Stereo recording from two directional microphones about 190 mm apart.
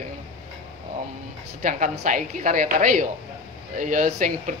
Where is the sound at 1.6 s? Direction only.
40° right (ahead or behind).